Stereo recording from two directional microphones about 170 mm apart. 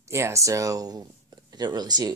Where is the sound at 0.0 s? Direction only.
15° right (ahead or behind).